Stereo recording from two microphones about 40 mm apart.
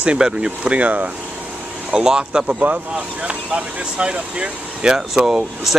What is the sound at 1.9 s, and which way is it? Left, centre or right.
Speech, centre.